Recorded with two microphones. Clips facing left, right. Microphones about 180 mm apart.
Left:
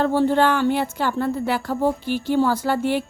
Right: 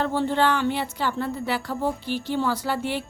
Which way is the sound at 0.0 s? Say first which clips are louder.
Left 5 dB; 45° left (ahead or behind).